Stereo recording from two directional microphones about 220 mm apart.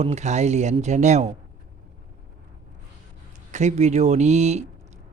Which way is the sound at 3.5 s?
30° right (ahead or behind).